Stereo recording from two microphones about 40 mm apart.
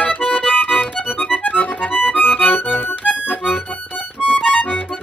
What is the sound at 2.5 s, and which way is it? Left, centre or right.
Accordion, left.